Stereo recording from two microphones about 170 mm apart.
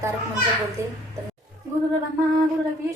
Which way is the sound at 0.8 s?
15° right (ahead or behind).